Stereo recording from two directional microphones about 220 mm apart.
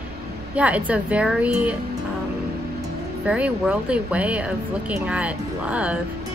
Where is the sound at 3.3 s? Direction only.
5° right (ahead or behind).